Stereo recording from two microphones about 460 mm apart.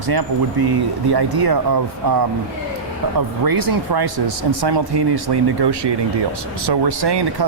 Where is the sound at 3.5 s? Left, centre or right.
Right.